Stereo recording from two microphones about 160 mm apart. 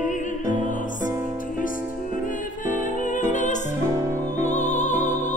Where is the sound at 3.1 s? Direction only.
50° left (ahead or behind).